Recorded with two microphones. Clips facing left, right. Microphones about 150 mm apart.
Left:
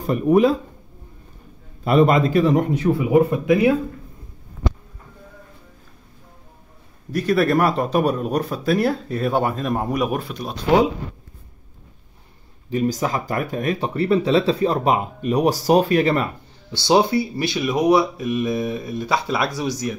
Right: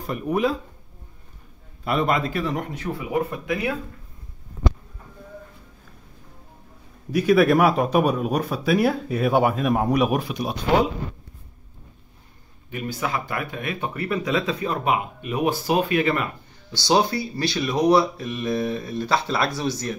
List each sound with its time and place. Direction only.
0.0 s speech: 35° left (ahead or behind)
1.9 s speech: 30° left (ahead or behind); by 3.7 s 10° left (ahead or behind)
7.1 s speech: 5° right (ahead or behind)
12.6 s speech: 35° left (ahead or behind)
16.7 s speech: 25° left (ahead or behind)